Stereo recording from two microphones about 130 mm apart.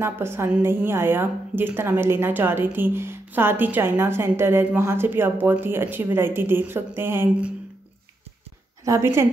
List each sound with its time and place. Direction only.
0.0 s a woman's voice: 20° right (ahead or behind)
8.8 s a woman's voice: 20° right (ahead or behind)